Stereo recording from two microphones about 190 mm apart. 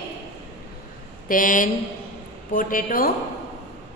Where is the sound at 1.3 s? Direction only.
45° left (ahead or behind).